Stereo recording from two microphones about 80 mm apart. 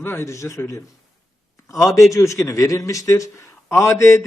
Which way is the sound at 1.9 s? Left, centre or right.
Left.